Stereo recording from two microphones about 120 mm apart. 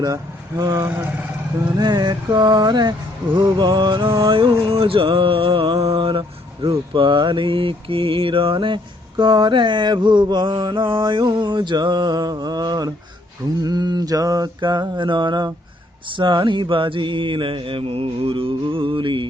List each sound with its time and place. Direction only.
0.0 s speech: 35° right (ahead or behind)
0.8 s speech: 20° right (ahead or behind)
1.6 s a sound: 35° right (ahead or behind)
16.0 s mantra: 40° right (ahead or behind)